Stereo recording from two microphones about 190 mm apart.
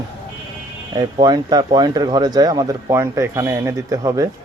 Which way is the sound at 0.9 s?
20° right (ahead or behind).